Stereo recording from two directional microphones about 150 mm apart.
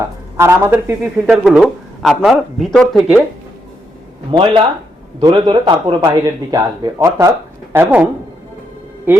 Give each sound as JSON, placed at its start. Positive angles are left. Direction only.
{"t": 0.3, "sound": "a man's voice", "side_deg": -15}
{"t": 1.5, "sound": "speech", "side_deg": 0}
{"t": 4.3, "sound": "a man's voice", "side_deg": -35}
{"t": 9.1, "sound": "a man's voice", "side_deg": -15}